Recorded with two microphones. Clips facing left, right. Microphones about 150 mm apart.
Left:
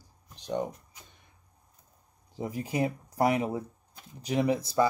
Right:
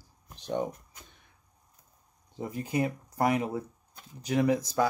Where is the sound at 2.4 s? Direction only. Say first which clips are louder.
Even; 5° left (ahead or behind).